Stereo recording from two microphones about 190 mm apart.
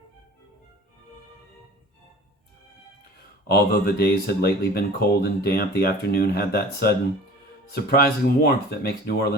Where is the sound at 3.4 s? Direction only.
55° left (ahead or behind).